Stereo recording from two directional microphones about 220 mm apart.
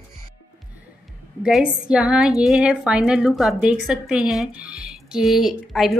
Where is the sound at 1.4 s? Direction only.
5° right (ahead or behind).